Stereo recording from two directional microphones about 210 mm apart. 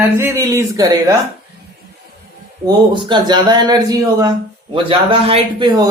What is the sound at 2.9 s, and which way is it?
Speech, 20° right (ahead or behind).